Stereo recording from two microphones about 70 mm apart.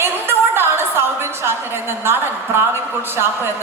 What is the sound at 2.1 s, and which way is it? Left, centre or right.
Speech, right.